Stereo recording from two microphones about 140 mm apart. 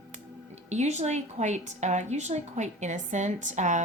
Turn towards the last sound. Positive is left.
turn(degrees=-60)  # may be behind; listen again after turning